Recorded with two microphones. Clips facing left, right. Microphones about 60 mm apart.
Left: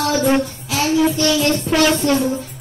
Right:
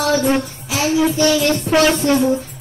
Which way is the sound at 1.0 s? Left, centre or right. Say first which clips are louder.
Right 2 dB; centre.